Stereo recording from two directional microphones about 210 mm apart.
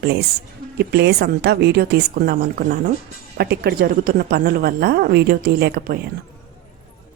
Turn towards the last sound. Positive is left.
turn(degrees=-45)  # may be behind; listen again after turning